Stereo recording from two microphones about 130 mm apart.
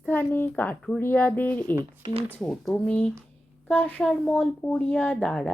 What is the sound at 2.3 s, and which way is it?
Speech, 5° left (ahead or behind).